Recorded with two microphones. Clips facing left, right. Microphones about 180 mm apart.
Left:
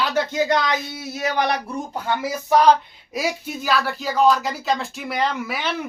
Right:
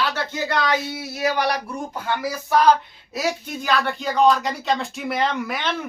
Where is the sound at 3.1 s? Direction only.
10° left (ahead or behind).